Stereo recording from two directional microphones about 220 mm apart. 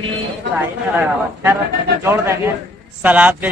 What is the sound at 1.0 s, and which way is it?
Speech, 10° right (ahead or behind).